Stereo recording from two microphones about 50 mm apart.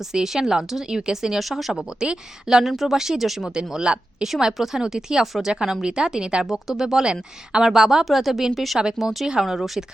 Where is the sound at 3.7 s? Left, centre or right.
Centre.